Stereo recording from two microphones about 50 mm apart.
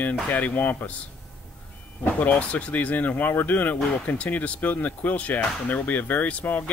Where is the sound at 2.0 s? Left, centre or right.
Left.